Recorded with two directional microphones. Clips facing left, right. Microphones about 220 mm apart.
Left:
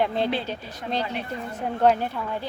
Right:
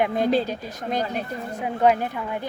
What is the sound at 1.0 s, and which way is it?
Speech, 45° right (ahead or behind).